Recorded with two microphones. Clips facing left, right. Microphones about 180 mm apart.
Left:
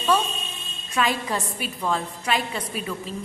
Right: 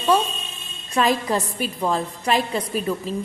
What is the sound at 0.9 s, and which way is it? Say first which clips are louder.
A woman's voice: right 4 dB; 40° right (ahead or behind).